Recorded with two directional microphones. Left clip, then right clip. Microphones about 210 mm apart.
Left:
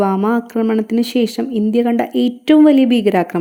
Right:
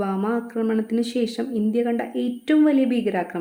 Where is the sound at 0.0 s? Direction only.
40° left (ahead or behind).